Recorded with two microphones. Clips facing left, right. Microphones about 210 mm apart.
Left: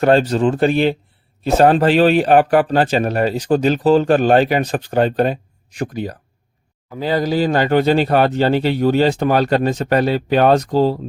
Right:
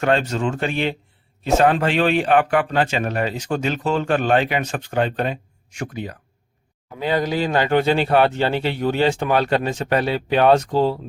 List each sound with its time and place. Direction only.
0.0 s speech: 35° left (ahead or behind)